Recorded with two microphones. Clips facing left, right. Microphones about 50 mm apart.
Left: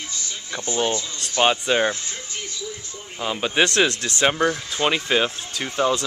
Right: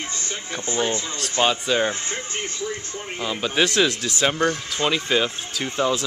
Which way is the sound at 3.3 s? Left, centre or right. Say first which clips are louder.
Left 2 dB; centre.